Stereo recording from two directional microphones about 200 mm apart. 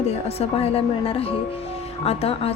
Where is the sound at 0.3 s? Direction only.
30° left (ahead or behind).